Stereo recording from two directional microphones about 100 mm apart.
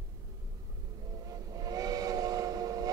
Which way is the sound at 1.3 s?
40° right (ahead or behind).